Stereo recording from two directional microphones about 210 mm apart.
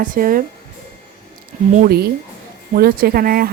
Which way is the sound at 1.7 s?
45° right (ahead or behind).